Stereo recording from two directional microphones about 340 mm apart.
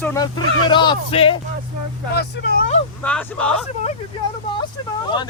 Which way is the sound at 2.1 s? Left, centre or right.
Left.